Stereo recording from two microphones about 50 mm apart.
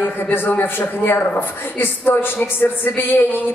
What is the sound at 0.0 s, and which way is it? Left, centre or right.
A woman's voice, left.